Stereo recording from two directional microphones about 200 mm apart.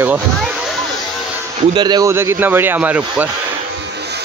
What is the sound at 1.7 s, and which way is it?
Speech, 20° right (ahead or behind).